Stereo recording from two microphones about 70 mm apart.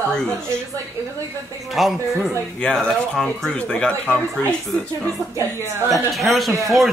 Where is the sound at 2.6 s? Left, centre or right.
Centre.